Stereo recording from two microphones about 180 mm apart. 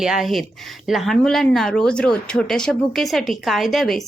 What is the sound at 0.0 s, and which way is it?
Speech, centre (ahead or behind).